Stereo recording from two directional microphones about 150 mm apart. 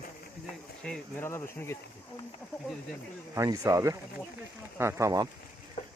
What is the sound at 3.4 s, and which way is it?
Speech, 20° right (ahead or behind).